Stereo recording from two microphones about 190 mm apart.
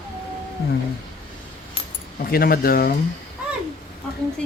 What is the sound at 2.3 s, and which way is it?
Speech, 50° left (ahead or behind).